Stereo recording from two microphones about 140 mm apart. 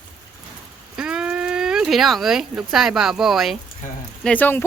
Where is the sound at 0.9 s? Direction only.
5° right (ahead or behind).